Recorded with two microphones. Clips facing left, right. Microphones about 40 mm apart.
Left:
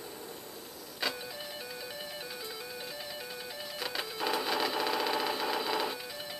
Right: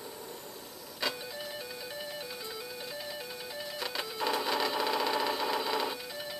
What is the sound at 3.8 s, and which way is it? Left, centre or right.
Sewing machine, centre.